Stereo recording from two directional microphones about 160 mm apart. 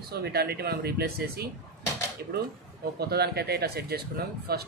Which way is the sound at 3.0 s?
80° right.